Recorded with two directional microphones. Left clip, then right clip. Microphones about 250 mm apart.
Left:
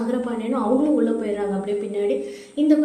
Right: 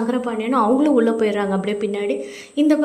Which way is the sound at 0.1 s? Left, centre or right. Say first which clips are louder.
Right 4 dB; right.